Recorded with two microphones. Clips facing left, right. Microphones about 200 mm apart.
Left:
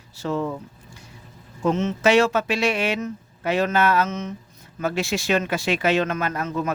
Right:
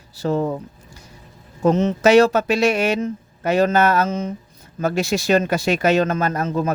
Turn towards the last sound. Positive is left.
turn(degrees=-35)  # may be behind; listen again after turning